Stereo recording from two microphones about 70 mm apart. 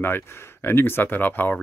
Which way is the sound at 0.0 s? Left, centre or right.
Left.